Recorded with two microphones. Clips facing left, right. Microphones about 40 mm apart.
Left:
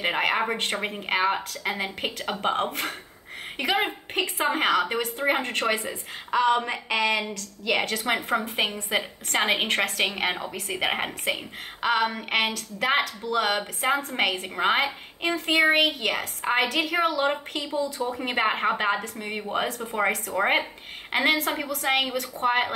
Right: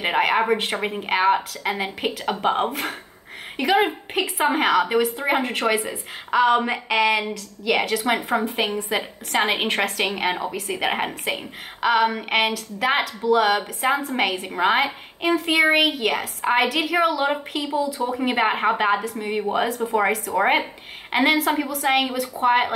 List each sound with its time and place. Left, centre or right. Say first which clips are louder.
0.0 s a woman's voice: right 4 dB; centre